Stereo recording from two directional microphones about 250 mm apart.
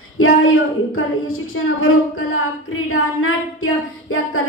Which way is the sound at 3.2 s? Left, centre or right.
Left.